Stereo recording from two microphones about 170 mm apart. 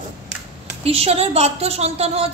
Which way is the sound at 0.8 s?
35° right (ahead or behind).